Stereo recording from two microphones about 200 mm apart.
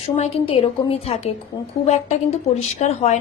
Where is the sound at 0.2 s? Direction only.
30° left (ahead or behind).